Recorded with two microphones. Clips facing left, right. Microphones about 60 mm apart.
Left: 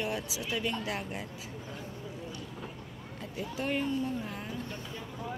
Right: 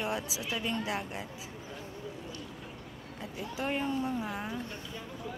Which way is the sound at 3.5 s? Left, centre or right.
Centre.